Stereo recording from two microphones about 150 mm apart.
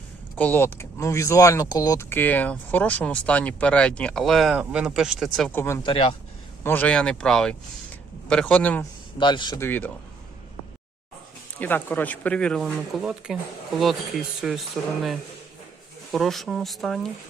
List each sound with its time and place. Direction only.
0.3 s speech: 10° left (ahead or behind)
5.5 s speech: 15° left (ahead or behind)
5.8 s speech: 35° left (ahead or behind)
6.6 s speech: 15° left (ahead or behind)
9.1 s speech: 30° left (ahead or behind)
9.6 s speech: 15° left (ahead or behind)
11.6 s speech: 10° left (ahead or behind)
16.1 s speech: centre (ahead or behind)